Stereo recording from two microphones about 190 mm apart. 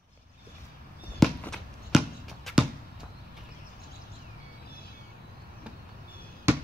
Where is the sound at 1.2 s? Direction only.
Centre (ahead or behind).